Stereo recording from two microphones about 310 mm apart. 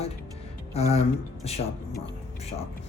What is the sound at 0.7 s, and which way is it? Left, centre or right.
Music, centre.